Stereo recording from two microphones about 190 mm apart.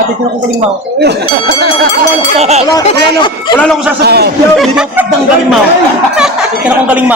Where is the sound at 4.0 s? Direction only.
55° right (ahead or behind).